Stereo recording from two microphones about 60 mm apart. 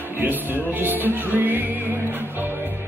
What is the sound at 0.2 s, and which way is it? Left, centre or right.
Music, right.